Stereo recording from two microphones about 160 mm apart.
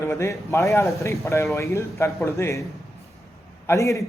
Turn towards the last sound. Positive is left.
turn(degrees=20)  # may be behind; listen again after turning